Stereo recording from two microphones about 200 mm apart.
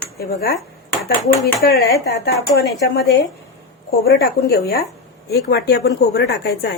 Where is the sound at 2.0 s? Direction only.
55° left (ahead or behind).